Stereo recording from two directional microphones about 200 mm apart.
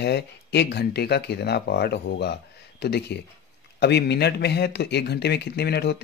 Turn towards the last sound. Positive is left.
turn(degrees=55)  # may be behind; listen again after turning